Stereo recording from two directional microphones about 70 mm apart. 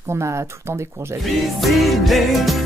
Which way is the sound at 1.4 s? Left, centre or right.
Centre.